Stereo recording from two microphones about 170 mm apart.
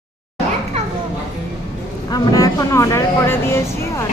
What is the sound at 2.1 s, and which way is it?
Speech, 20° left (ahead or behind).